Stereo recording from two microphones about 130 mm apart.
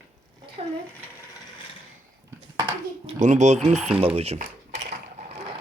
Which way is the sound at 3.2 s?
65° right (ahead or behind).